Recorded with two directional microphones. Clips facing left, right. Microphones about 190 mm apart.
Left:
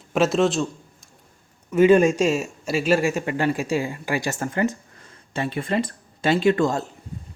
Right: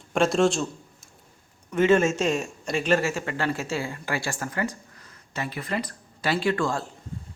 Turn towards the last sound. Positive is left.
turn(degrees=20)  # may be behind; listen again after turning